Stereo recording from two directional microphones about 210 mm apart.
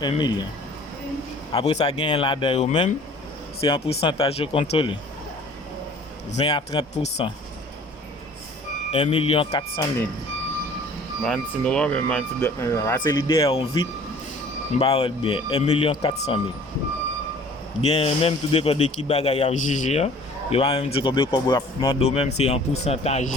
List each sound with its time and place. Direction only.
0.0 s speech: 20° left (ahead or behind)
1.5 s speech: 25° left (ahead or behind)
6.3 s speech: 20° left (ahead or behind)
8.9 s speech: 30° left (ahead or behind)
11.2 s speech: 5° left (ahead or behind)
14.8 s speech: 25° left (ahead or behind)
17.7 s a man's voice: 30° left (ahead or behind)